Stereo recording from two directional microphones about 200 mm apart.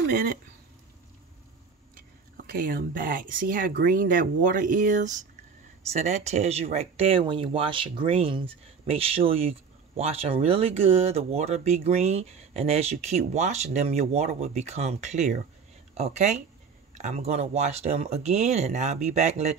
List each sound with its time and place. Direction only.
2.0 s speech: 45° right (ahead or behind)